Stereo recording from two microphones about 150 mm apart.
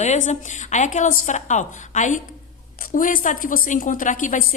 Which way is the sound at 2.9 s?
65° left (ahead or behind).